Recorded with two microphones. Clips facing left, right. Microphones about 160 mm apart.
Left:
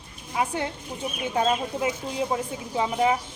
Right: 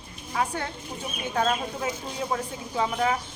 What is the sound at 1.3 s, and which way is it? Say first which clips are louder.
Speech: left 1 dB; 15° left (ahead or behind).